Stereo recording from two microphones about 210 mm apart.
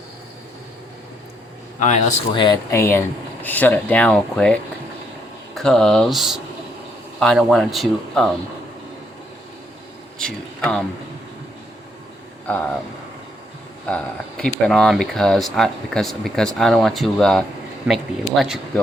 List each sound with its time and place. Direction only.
1.8 s speech: 35° left (ahead or behind)
2.3 s speech: 20° left (ahead or behind); by 8.3 s centre (ahead or behind)
10.2 s speech: 5° left (ahead or behind)
13.8 s speech: 5° left (ahead or behind)